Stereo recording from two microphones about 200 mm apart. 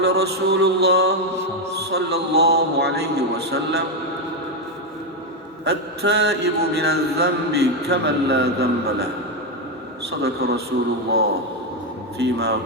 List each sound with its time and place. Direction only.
0.0 s a man's voice: 55° right (ahead or behind)
5.6 s mantra: 55° right (ahead or behind)
10.1 s a man's voice: 55° right (ahead or behind)
12.2 s a man's voice: 55° right (ahead or behind)